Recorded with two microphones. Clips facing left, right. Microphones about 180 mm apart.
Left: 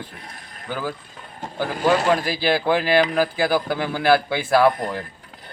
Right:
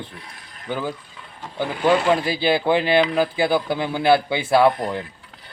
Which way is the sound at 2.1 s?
25° right (ahead or behind).